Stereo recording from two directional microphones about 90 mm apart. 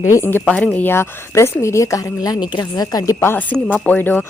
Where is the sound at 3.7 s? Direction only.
20° left (ahead or behind).